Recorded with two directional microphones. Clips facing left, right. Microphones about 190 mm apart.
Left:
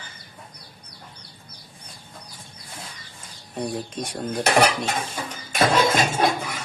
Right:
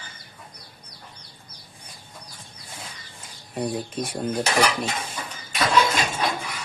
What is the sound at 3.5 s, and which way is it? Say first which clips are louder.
Speech: right 1 dB; centre (ahead or behind).